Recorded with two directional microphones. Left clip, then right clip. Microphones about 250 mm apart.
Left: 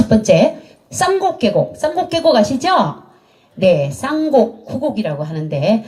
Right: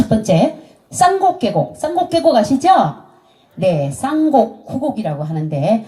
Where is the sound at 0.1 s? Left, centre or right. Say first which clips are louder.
Left 6 dB; left.